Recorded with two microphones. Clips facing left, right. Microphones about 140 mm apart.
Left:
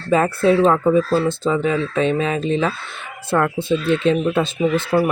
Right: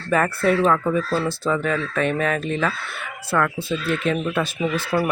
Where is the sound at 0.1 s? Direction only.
20° left (ahead or behind).